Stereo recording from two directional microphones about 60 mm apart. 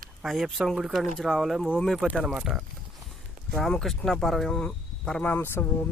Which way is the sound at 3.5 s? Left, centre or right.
Centre.